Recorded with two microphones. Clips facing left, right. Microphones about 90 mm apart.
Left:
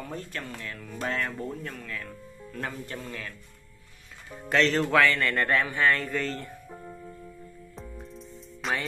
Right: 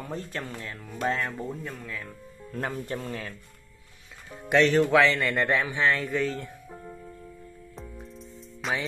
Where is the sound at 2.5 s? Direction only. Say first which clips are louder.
Right 4 dB; 30° right (ahead or behind).